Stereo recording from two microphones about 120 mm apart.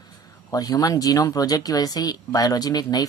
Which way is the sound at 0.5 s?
30° left (ahead or behind).